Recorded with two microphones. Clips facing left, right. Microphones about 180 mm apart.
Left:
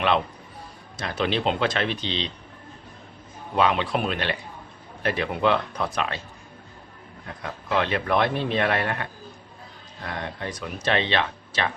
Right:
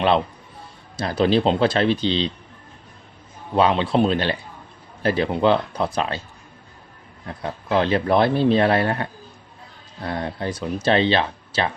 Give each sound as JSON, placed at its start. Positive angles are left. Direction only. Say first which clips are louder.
{"t": 0.9, "sound": "a man's voice", "louder": "right 7 dB", "side_deg": -35}
{"t": 3.5, "sound": "a man's voice", "louder": "right 4 dB", "side_deg": -30}
{"t": 7.3, "sound": "a man's voice", "louder": "right 5 dB", "side_deg": -30}